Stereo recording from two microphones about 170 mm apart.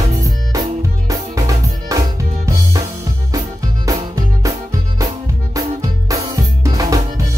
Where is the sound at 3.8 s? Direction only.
20° right (ahead or behind).